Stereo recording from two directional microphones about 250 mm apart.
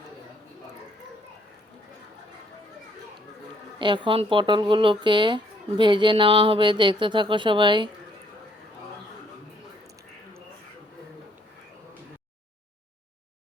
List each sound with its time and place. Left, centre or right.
3.8 s speech: centre